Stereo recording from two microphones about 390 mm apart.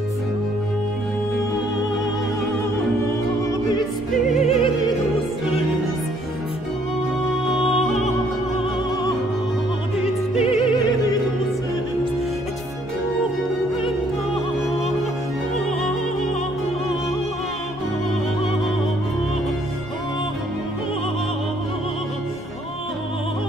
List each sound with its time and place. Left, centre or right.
4.4 s opera: centre
10.0 s opera: centre